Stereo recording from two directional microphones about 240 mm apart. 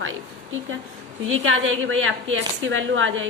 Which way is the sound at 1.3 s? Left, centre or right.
Right.